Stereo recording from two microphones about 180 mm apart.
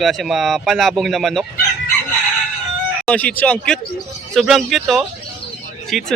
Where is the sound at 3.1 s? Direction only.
5° left (ahead or behind).